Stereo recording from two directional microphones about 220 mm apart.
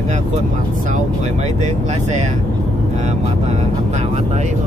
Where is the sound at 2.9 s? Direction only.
30° right (ahead or behind).